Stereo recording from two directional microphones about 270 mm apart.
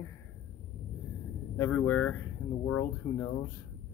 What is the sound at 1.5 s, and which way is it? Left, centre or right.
Speech, centre.